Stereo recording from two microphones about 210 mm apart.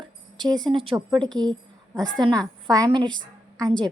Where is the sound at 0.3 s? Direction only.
20° right (ahead or behind).